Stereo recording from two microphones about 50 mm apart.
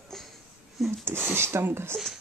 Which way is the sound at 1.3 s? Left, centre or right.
Right.